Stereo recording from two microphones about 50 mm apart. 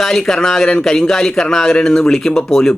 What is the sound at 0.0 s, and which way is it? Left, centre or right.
A man's voice, centre.